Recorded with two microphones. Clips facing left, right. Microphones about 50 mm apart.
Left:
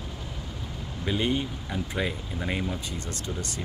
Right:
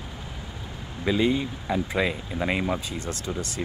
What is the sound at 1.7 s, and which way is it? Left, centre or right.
Speech, right.